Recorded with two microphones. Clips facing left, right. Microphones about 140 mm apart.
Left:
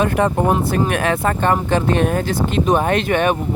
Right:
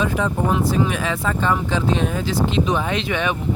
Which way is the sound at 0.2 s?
60° left (ahead or behind).